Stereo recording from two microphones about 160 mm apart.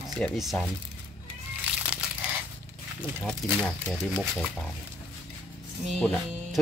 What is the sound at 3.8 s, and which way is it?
Speech, 5° left (ahead or behind).